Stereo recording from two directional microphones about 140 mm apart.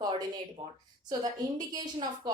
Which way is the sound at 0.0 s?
30° right (ahead or behind).